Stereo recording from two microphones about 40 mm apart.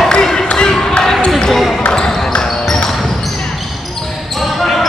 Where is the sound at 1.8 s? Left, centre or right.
Centre.